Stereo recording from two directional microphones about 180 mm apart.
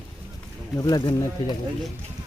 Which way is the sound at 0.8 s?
20° left (ahead or behind).